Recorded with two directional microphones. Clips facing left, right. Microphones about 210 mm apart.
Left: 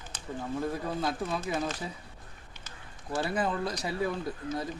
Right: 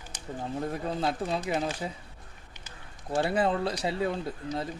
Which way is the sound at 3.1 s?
25° right (ahead or behind).